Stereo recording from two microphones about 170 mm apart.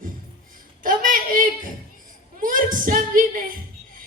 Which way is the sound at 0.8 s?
55° right (ahead or behind).